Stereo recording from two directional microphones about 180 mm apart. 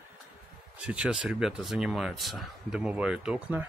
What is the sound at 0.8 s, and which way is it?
Speech, 5° right (ahead or behind).